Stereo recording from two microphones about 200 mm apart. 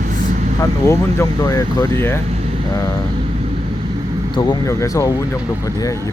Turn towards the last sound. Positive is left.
turn(degrees=15)  # may be behind; listen again after turning